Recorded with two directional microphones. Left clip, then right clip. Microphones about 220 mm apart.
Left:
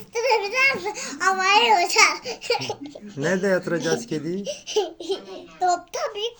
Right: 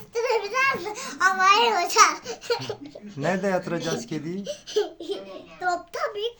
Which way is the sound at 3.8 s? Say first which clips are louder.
Left 5 dB; 15° right (ahead or behind).